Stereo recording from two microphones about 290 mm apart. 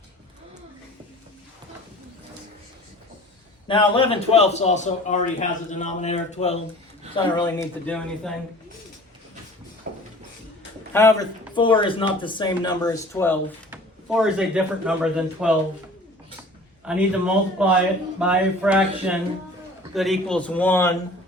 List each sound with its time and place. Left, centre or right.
3.7 s a man's voice: centre
7.3 s speech: centre
10.9 s speech: centre
16.8 s speech: centre